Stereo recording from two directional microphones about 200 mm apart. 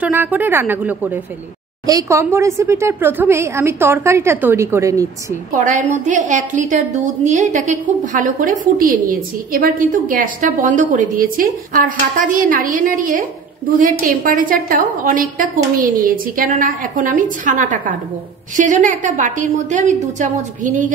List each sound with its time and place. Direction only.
0.0 s a woman's voice: 10° right (ahead or behind)
5.6 s a woman's voice: 40° right (ahead or behind)